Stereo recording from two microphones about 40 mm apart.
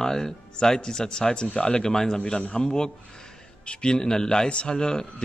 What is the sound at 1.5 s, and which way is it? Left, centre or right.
Speech, left.